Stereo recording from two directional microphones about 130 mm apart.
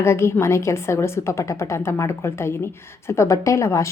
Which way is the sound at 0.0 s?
20° left (ahead or behind).